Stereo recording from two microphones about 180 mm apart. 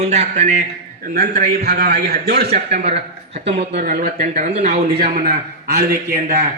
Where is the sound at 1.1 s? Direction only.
60° right (ahead or behind).